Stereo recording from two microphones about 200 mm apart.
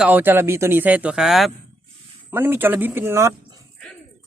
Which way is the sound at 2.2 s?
10° right (ahead or behind).